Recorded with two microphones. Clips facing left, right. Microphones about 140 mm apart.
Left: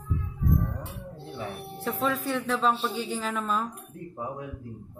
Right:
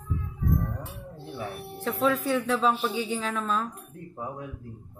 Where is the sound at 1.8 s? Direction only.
5° left (ahead or behind).